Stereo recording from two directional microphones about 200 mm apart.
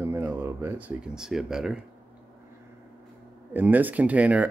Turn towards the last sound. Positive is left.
turn(degrees=-5)  # may be behind; listen again after turning